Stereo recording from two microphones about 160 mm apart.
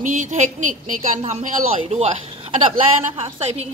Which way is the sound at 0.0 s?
50° right (ahead or behind).